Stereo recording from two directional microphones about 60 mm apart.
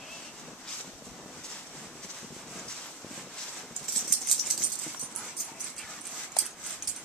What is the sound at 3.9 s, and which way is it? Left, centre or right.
Dog, centre.